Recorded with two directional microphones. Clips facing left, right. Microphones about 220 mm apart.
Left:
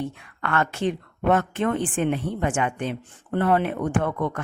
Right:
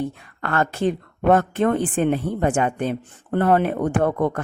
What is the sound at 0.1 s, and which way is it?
Speech, 40° right (ahead or behind).